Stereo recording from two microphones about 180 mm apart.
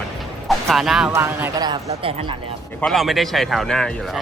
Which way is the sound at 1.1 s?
15° right (ahead or behind).